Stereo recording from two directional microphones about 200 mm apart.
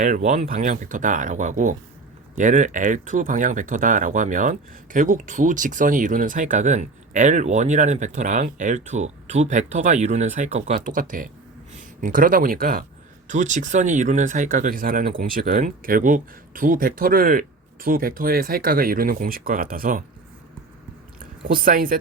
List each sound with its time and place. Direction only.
0.0 s speech: 40° right (ahead or behind)
21.2 s speech: 45° right (ahead or behind)